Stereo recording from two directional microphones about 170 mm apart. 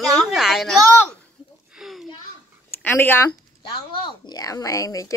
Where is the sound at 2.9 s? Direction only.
10° left (ahead or behind).